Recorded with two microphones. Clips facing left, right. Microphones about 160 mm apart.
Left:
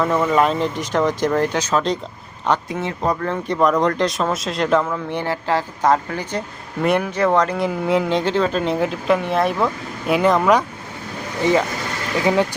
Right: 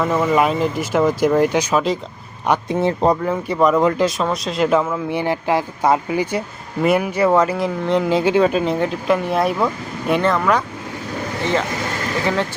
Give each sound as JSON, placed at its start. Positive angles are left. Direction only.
{"t": 0.0, "sound": "speech", "side_deg": 0}
{"t": 2.6, "sound": "speech", "side_deg": -30}
{"t": 3.2, "sound": "speech", "side_deg": -5}
{"t": 8.6, "sound": "speech", "side_deg": 0}
{"t": 10.2, "sound": "speech", "side_deg": 15}